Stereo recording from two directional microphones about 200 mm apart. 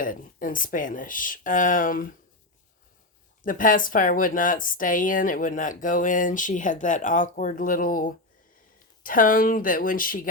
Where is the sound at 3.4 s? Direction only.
40° left (ahead or behind).